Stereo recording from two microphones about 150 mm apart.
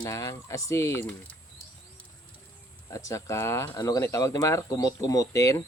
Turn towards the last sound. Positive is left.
turn(degrees=20)  # may be behind; listen again after turning